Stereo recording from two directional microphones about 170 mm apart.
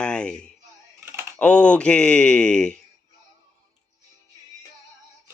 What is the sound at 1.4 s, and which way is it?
Speech, 5° left (ahead or behind).